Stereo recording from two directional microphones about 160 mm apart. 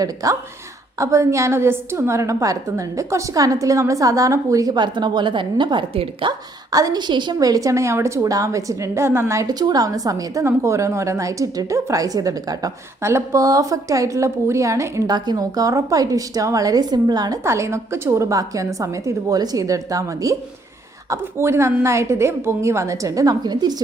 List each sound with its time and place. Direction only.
0.0 s a woman's voice: 20° right (ahead or behind)
6.7 s a woman's voice: 20° right (ahead or behind)